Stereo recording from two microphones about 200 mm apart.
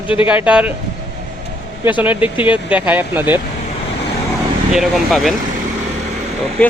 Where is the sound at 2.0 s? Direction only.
10° right (ahead or behind).